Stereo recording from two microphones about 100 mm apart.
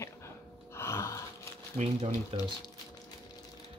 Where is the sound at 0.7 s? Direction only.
25° left (ahead or behind).